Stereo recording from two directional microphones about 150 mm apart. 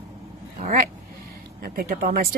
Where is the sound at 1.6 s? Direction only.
85° right.